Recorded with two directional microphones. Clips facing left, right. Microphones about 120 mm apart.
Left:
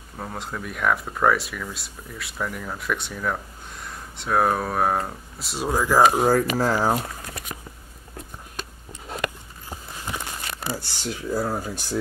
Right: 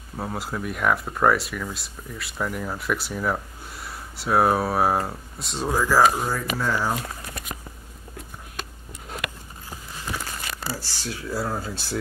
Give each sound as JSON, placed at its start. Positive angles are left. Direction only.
{"t": 0.2, "sound": "speech", "side_deg": -5}
{"t": 5.5, "sound": "speech", "side_deg": 10}
{"t": 6.1, "sound": "speech", "side_deg": 50}
{"t": 9.7, "sound": "a sound", "side_deg": 20}
{"t": 10.7, "sound": "speech", "side_deg": 20}